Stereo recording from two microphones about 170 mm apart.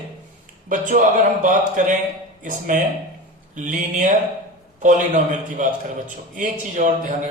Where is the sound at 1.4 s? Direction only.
50° right (ahead or behind).